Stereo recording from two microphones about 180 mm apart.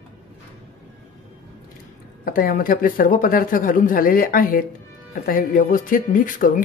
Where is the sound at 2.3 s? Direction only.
50° left (ahead or behind).